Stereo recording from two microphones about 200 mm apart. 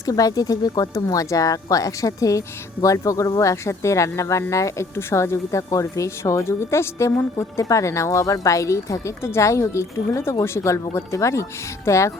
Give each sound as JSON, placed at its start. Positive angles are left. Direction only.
{"t": 0.0, "sound": "speech", "side_deg": 20}